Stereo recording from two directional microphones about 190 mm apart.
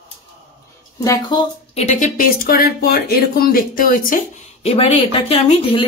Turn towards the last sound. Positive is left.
turn(degrees=30)  # may be behind; listen again after turning